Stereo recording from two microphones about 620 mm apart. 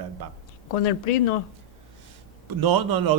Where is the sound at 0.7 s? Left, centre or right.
Left.